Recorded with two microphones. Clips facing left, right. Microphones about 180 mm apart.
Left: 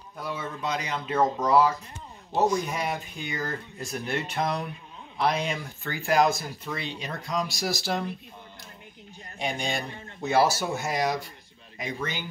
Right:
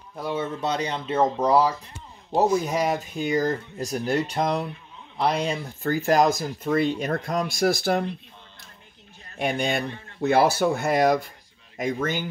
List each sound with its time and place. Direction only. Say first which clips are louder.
0.2 s speech: right 5 dB; 30° right (ahead or behind); by 8.0 s 55° right (ahead or behind)
9.4 s speech: right 5 dB; 60° right (ahead or behind)